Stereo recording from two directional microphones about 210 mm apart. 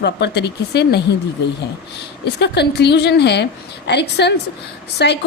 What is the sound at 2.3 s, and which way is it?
A woman's voice, 55° left (ahead or behind).